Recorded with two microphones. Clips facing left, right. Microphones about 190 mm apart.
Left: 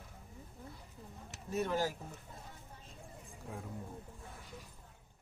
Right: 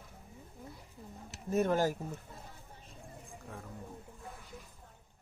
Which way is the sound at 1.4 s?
50° right (ahead or behind).